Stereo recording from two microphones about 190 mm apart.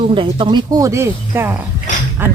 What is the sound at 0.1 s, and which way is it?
Speech, 25° right (ahead or behind).